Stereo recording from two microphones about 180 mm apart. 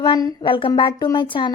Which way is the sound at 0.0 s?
25° left (ahead or behind).